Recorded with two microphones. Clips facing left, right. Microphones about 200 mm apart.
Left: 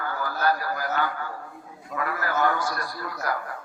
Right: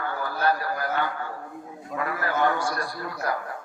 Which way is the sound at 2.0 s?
25° right (ahead or behind).